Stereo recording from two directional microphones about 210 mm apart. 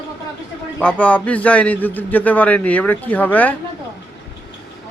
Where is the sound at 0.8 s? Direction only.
5° left (ahead or behind).